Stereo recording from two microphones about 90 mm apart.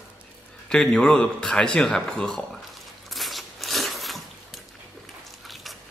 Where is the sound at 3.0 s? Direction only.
Centre (ahead or behind).